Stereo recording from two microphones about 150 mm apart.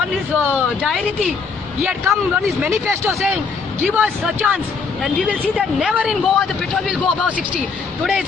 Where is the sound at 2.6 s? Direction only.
15° right (ahead or behind).